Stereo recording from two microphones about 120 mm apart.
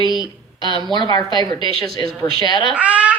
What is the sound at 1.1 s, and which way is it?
Speech, 35° left (ahead or behind).